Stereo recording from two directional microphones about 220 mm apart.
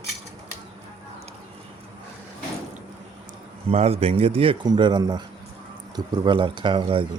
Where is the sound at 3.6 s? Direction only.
30° right (ahead or behind).